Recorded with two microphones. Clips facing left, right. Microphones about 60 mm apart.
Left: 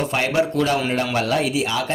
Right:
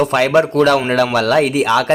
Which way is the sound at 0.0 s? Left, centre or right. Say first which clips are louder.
Right 7 dB; right.